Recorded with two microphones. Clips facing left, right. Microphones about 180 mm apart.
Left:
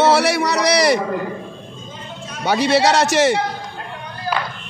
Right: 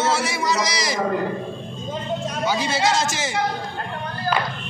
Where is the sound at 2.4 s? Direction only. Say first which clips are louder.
Left 7 dB; 70° left (ahead or behind).